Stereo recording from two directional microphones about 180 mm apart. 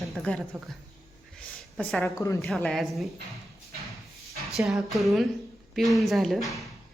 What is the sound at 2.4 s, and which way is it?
Speech, centre (ahead or behind).